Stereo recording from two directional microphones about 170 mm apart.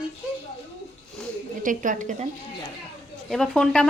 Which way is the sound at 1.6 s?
50° right (ahead or behind).